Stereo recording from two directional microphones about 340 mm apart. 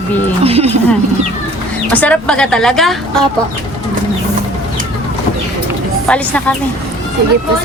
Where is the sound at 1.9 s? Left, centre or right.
Centre.